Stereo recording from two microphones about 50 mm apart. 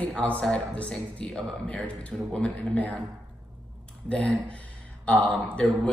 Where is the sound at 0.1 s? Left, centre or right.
Left.